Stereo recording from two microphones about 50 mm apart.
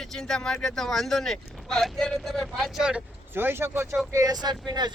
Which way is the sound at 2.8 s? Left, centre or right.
Centre.